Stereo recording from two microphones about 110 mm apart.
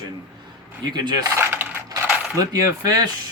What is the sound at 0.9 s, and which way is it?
Speech, 40° right (ahead or behind).